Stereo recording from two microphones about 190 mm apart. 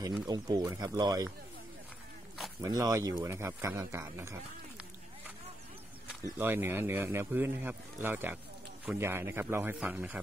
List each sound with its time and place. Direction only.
0.3 s speech: 20° right (ahead or behind)
2.6 s speech: 20° right (ahead or behind)
6.2 s speech: 10° right (ahead or behind)